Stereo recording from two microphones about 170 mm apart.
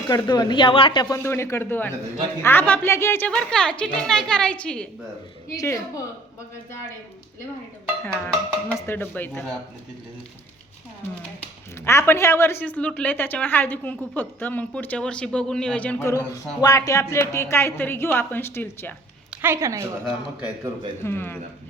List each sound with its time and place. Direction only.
0.1 s a woman's voice: 25° left (ahead or behind); by 4.9 s 5° left (ahead or behind)
5.5 s speech: 20° left (ahead or behind)
8.0 s a sound: 10° left (ahead or behind)
8.9 s a woman's voice: 10° left (ahead or behind)
11.9 s a woman's voice: 15° left (ahead or behind)
19.3 s a woman's voice: 10° right (ahead or behind)
21.0 s a woman's voice: 15° left (ahead or behind)